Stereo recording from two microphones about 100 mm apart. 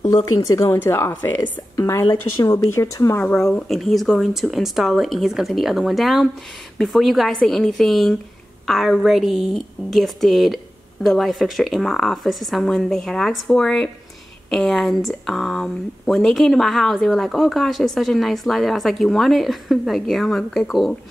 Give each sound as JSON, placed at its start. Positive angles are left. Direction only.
{"t": 0.1, "sound": "speech", "side_deg": 35}
{"t": 3.6, "sound": "speech", "side_deg": 0}